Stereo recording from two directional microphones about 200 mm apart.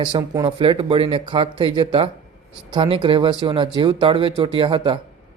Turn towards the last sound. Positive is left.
turn(degrees=-25)  # may be behind; listen again after turning